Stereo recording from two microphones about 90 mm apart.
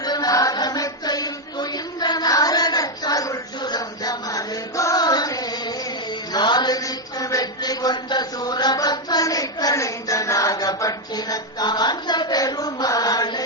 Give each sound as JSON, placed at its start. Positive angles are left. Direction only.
{"t": 0.0, "sound": "chant", "side_deg": 50}
{"t": 6.3, "sound": "mantra", "side_deg": 55}